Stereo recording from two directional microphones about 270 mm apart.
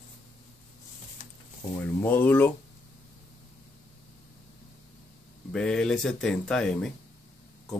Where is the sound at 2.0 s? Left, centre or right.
Centre.